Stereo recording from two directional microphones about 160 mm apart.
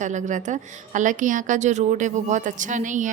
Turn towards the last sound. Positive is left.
turn(degrees=-50)  # may be behind; listen again after turning